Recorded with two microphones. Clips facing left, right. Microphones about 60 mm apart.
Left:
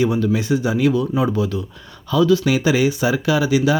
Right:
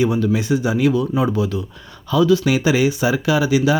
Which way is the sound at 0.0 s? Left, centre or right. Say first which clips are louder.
Even; centre.